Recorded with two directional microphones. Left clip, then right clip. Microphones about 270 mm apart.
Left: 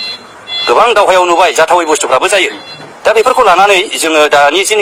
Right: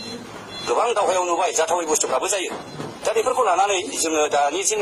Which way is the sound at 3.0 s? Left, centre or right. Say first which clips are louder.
Left 13 dB; left.